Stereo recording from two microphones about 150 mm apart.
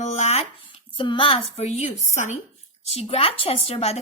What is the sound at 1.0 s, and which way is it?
A woman's voice, 35° left (ahead or behind).